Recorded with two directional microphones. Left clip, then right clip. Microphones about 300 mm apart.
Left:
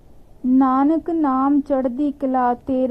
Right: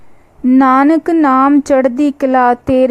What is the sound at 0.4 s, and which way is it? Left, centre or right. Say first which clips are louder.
A woman's voice: right 8 dB; right.